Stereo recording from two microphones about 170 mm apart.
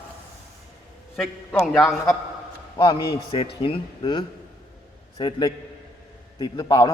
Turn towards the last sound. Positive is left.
turn(degrees=25)  # may be behind; listen again after turning